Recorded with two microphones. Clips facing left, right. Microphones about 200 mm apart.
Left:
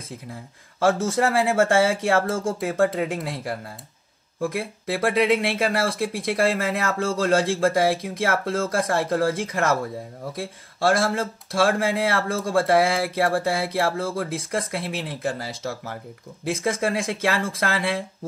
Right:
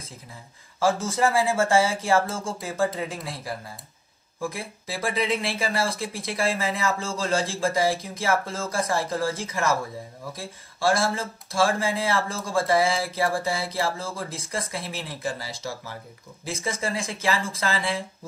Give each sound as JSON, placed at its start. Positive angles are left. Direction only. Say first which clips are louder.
{"t": 0.3, "sound": "speech", "louder": "left 8 dB", "side_deg": 60}